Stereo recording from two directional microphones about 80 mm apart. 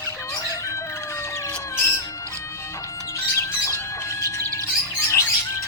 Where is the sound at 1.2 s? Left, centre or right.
Left.